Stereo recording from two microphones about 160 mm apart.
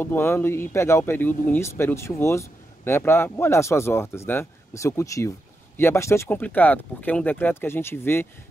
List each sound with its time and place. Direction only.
0.0 s speech: 15° left (ahead or behind)